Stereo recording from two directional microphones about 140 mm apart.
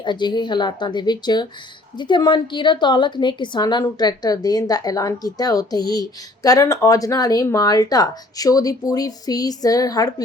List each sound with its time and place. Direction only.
0.0 s a woman's voice: 30° left (ahead or behind)